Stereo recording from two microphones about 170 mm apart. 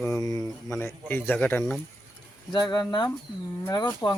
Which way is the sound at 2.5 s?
25° left (ahead or behind).